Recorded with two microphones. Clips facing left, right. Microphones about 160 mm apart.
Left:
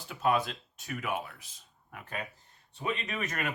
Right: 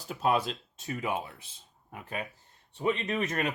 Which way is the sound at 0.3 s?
25° right (ahead or behind).